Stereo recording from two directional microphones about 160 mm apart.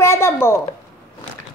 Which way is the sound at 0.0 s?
15° left (ahead or behind).